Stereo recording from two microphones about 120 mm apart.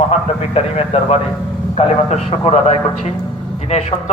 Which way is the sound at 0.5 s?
55° left (ahead or behind).